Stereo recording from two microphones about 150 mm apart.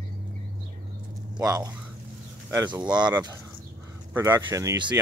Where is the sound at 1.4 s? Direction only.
25° right (ahead or behind).